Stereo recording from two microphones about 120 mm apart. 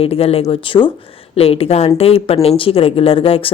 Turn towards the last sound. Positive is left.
turn(degrees=50)  # may be behind; listen again after turning